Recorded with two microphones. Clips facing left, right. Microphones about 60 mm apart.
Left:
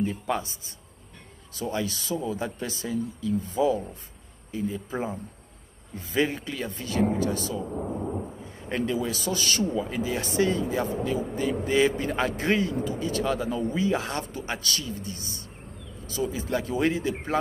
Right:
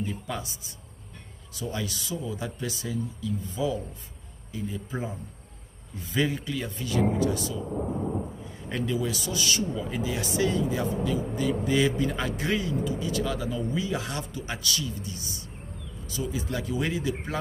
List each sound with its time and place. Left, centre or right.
0.0 s speech: left
6.7 s speech: left
8.6 s speech: left